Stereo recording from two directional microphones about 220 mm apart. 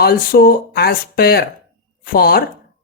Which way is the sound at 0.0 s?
45° left (ahead or behind).